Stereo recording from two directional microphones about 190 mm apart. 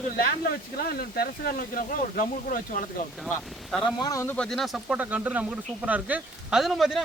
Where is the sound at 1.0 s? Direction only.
50° left (ahead or behind).